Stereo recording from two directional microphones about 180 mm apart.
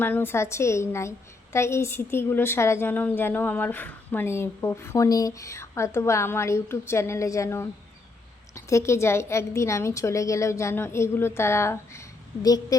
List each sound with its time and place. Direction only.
0.0 s a woman's voice: 10° left (ahead or behind)